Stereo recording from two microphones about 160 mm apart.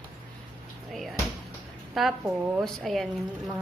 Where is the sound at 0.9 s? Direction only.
Centre (ahead or behind).